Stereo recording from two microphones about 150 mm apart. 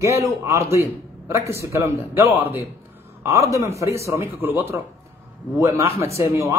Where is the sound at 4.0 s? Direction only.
20° right (ahead or behind).